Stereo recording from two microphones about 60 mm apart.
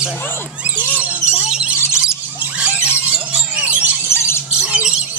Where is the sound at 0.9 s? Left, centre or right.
Centre.